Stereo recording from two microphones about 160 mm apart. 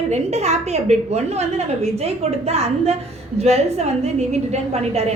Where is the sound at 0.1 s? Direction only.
45° right (ahead or behind).